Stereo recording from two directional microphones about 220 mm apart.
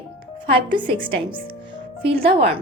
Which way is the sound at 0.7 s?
20° right (ahead or behind).